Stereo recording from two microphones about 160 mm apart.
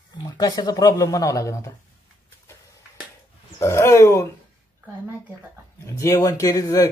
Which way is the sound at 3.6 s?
15° left (ahead or behind).